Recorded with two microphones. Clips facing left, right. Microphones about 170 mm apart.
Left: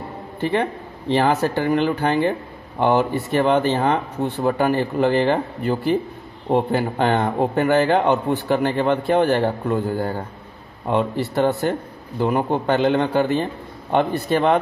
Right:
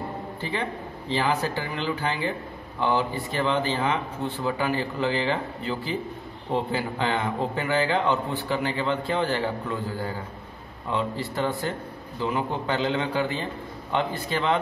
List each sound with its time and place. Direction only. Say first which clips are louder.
0.4 s a man's voice: left 10 dB; 65° left (ahead or behind)
12.2 s a man's voice: left 7 dB; 55° left (ahead or behind)